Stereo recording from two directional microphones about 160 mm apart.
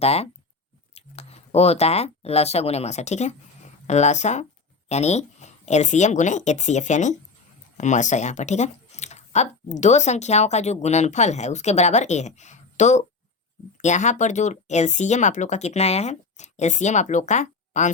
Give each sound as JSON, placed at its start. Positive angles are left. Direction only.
{"t": 0.0, "sound": "speech", "side_deg": 40}